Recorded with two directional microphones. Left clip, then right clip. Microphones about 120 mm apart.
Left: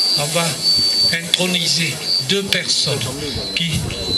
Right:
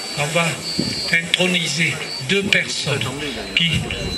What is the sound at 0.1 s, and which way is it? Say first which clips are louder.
Speech: left 2 dB; 15° left (ahead or behind).